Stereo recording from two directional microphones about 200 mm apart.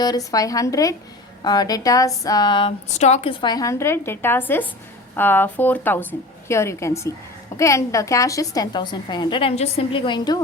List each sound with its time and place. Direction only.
0.0 s a woman's voice: 20° left (ahead or behind)